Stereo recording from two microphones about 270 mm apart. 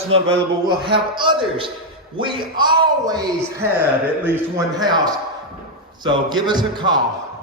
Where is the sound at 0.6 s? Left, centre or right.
Centre.